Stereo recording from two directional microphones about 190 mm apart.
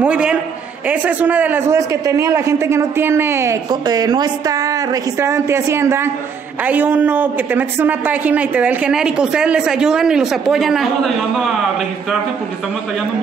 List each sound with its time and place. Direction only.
0.0 s a man's voice: 5° right (ahead or behind)